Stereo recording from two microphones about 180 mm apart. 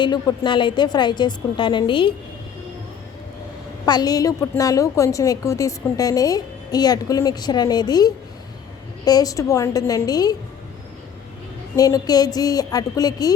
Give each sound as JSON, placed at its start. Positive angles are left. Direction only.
{"t": 0.0, "sound": "a woman's voice", "side_deg": 25}
{"t": 3.8, "sound": "a woman's voice", "side_deg": 20}
{"t": 11.8, "sound": "a woman's voice", "side_deg": 20}